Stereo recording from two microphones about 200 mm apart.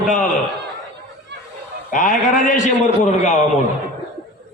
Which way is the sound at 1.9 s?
40° left (ahead or behind).